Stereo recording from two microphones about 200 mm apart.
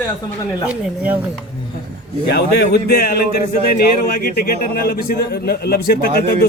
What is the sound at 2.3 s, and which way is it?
A man's voice, 50° left (ahead or behind).